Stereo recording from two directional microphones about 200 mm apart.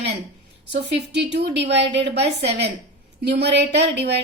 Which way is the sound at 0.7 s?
60° right (ahead or behind).